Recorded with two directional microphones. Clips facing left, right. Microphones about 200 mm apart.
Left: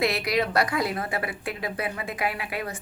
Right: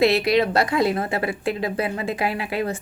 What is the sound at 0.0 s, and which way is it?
A woman's voice, 25° right (ahead or behind).